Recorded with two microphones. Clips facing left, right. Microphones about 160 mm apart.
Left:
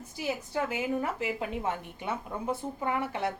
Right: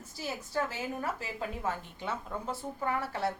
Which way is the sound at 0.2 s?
15° left (ahead or behind).